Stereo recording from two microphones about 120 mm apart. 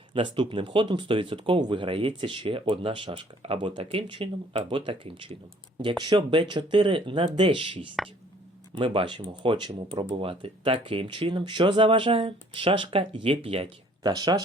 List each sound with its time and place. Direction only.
0.1 s speech: 45° right (ahead or behind)